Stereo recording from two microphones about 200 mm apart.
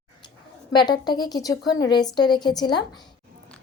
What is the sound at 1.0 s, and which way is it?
A woman's voice, 20° left (ahead or behind).